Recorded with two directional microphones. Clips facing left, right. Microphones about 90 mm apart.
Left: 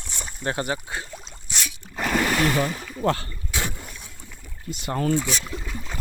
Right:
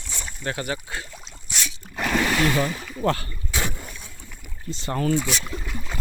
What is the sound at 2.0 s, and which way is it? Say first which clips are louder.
Splash: even; 35° left (ahead or behind).